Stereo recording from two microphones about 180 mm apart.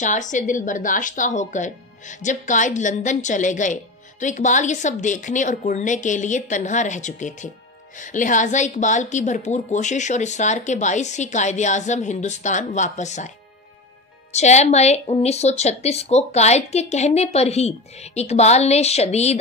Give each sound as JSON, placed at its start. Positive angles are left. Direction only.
{"t": 0.0, "sound": "a woman's voice", "side_deg": 45}
{"t": 14.3, "sound": "speech", "side_deg": 40}